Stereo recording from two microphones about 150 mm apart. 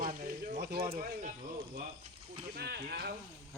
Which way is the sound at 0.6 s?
90° right.